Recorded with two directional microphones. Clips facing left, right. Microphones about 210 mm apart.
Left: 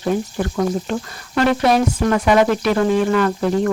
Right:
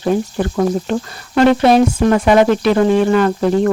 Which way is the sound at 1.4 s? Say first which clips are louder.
Right 5 dB; 25° right (ahead or behind).